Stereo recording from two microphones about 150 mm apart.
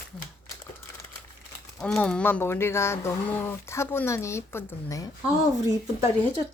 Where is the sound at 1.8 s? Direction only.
5° left (ahead or behind).